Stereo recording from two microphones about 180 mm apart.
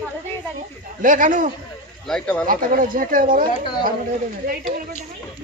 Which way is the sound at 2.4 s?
50° right (ahead or behind).